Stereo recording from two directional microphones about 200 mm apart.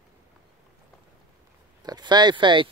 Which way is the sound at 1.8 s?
20° right (ahead or behind).